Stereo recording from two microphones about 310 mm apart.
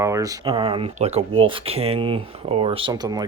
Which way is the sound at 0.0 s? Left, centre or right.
Centre.